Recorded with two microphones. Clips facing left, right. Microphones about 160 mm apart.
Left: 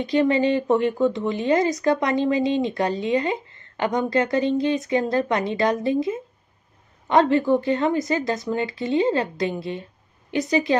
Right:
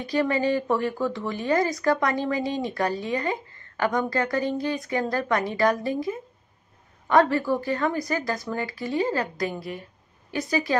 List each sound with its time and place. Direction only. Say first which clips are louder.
0.0 s speech: left 4 dB; 20° left (ahead or behind)